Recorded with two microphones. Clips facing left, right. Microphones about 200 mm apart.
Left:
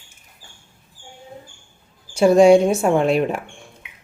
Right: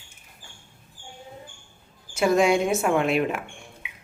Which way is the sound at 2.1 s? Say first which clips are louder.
Left 9 dB; 30° left (ahead or behind).